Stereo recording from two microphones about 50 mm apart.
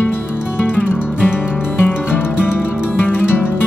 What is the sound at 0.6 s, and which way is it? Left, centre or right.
Music, left.